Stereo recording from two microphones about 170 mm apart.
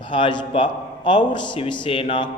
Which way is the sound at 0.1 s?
30° left (ahead or behind).